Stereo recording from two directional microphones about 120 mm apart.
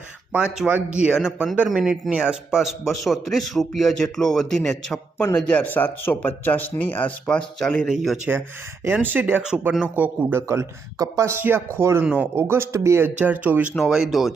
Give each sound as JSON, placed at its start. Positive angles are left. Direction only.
{"t": 0.3, "sound": "a man's voice", "side_deg": -10}
{"t": 8.8, "sound": "speech", "side_deg": -15}
{"t": 9.4, "sound": "a man's voice", "side_deg": -5}
{"t": 13.1, "sound": "a man's voice", "side_deg": -15}